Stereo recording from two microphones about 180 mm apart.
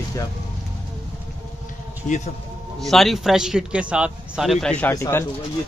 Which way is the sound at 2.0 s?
40° left (ahead or behind).